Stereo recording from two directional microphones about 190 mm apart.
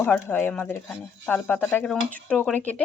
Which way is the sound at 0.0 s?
10° left (ahead or behind).